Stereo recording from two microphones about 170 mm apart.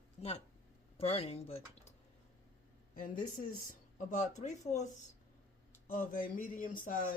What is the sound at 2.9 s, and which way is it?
Speech, 55° left (ahead or behind).